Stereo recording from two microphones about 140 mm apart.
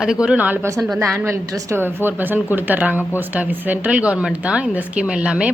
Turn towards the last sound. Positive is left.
turn(degrees=-10)  # may be behind; listen again after turning